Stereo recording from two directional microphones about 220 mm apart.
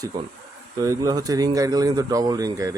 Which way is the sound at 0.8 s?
15° right (ahead or behind).